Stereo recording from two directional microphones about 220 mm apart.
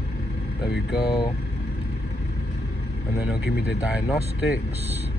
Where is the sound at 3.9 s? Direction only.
5° right (ahead or behind).